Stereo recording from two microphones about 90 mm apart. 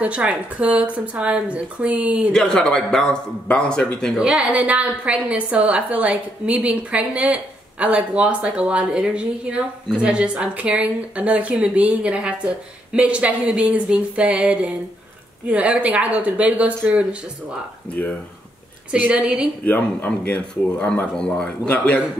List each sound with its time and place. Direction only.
0.0 s a woman's voice: 15° right (ahead or behind)
2.3 s a man's voice: 5° left (ahead or behind)
4.2 s a woman's voice: 10° right (ahead or behind)
18.9 s a woman's voice: 15° right (ahead or behind)
19.6 s a man's voice: 20° left (ahead or behind)